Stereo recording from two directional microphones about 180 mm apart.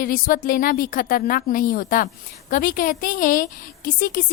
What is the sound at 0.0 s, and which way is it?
A woman's voice, 50° left (ahead or behind).